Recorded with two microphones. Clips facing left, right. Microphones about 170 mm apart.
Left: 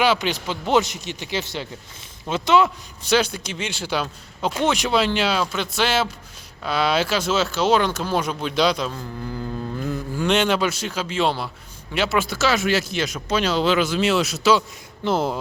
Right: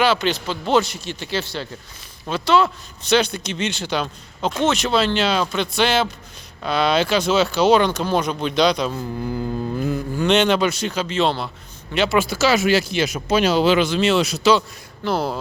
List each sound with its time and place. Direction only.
0.0 s a man's voice: 15° left (ahead or behind)
9.9 s a man's voice: 5° left (ahead or behind)
13.7 s speech: 5° left (ahead or behind)
15.0 s speech: 20° left (ahead or behind)